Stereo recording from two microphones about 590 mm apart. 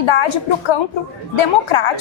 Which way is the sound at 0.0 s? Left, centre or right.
Left.